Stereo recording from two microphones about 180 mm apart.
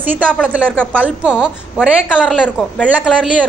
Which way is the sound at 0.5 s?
10° right (ahead or behind).